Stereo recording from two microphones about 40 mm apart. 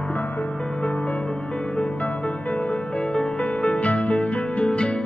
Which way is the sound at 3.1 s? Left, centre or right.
Left.